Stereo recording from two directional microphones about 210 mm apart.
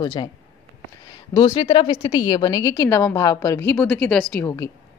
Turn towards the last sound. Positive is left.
turn(degrees=15)  # may be behind; listen again after turning